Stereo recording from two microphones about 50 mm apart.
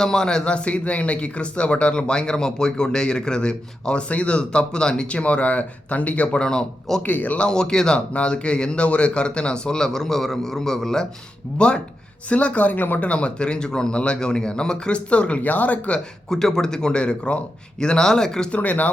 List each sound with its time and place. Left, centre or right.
0.0 s speech: centre; by 6.4 s left
6.4 s speech: centre
7.0 s speech: left
7.4 s speech: centre
11.5 s speech: centre; by 13.1 s left
13.1 s speech: left
16.3 s speech: centre
18.5 s speech: left